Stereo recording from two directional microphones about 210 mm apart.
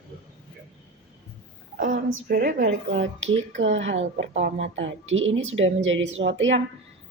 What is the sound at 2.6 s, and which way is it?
A woman's voice, 65° right (ahead or behind).